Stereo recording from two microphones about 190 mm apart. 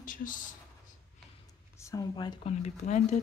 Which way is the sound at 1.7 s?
15° left (ahead or behind).